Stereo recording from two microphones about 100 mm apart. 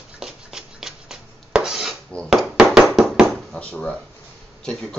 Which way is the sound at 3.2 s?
10° left (ahead or behind).